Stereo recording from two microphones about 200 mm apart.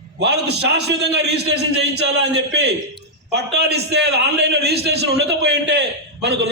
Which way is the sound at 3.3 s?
55° right (ahead or behind).